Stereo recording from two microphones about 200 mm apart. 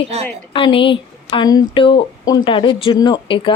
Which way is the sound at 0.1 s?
30° right (ahead or behind).